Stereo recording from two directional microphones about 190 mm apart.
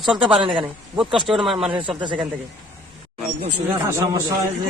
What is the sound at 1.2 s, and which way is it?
Speech, centre (ahead or behind).